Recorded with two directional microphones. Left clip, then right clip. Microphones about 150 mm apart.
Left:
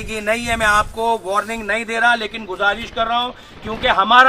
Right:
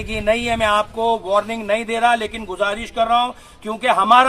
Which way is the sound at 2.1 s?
10° right (ahead or behind).